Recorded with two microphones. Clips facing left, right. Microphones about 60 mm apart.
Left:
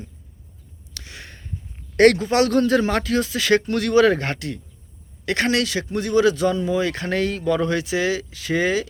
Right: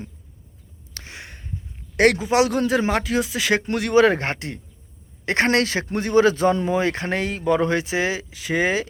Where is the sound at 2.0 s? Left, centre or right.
Centre.